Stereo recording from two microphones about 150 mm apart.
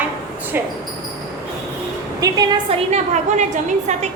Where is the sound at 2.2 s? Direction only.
25° right (ahead or behind).